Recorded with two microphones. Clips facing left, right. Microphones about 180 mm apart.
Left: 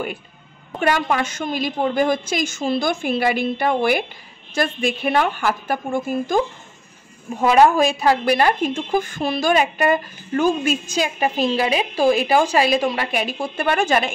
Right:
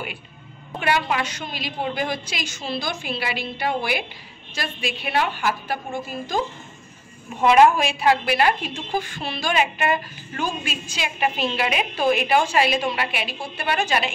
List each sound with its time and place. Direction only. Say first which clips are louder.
0.7 s a woman's voice: left 3 dB; 45° left (ahead or behind)
7.4 s a woman's voice: left 1 dB; 35° left (ahead or behind)